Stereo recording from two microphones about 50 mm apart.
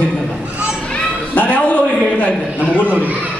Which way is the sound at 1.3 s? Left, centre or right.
Left.